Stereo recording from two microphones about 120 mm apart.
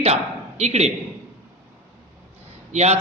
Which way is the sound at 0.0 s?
65° right (ahead or behind).